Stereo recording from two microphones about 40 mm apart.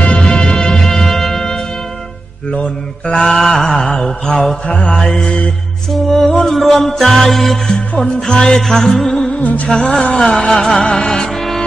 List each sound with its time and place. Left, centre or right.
0.0 s music: left
2.5 s mantra: left
3.3 s mantra: centre
5.9 s music: centre
8.3 s mantra: centre